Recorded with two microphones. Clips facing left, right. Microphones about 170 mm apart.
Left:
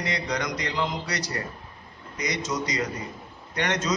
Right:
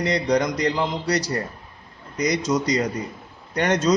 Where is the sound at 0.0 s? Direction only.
35° right (ahead or behind).